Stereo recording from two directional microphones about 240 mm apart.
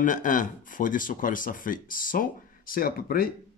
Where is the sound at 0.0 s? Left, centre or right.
Left.